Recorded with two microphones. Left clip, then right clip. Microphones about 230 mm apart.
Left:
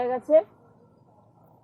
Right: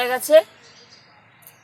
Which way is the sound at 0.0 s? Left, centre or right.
Centre.